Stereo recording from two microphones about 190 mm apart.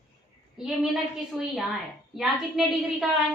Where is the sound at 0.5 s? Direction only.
Centre (ahead or behind).